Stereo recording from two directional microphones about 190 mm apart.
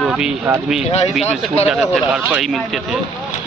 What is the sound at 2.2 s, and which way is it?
Speech, centre (ahead or behind).